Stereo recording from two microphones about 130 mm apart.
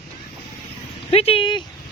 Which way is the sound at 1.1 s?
45° left (ahead or behind).